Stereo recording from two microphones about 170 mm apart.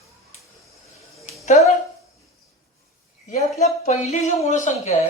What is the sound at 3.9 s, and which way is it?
Speech, 40° left (ahead or behind).